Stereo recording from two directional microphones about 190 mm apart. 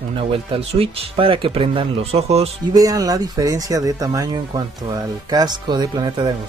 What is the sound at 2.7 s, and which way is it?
Speech, 20° right (ahead or behind).